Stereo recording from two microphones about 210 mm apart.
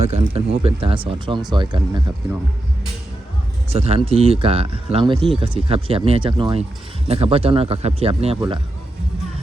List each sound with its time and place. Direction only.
0.1 s speech: 25° right (ahead or behind)
3.7 s speech: 30° right (ahead or behind)